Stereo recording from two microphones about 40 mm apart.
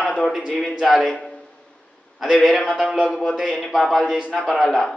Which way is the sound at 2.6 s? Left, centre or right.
Right.